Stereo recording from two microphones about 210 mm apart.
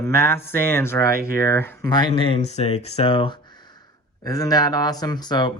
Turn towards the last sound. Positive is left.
turn(degrees=20)  # may be behind; listen again after turning